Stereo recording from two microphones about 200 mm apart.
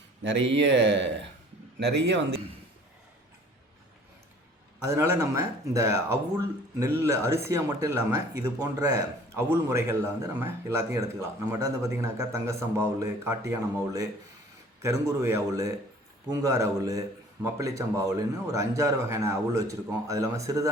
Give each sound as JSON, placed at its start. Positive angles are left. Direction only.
{"t": 0.3, "sound": "speech", "side_deg": -65}
{"t": 4.9, "sound": "a man's voice", "side_deg": -15}
{"t": 7.0, "sound": "a man's voice", "side_deg": -15}